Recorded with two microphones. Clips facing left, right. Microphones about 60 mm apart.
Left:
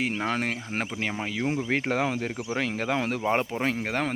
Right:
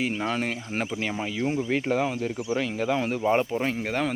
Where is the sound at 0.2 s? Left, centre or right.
Left.